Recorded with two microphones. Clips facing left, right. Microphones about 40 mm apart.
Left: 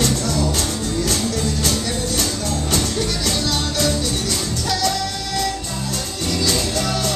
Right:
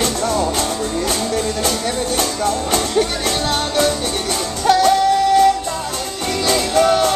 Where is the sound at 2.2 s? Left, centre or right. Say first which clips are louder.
Right 4 dB; right.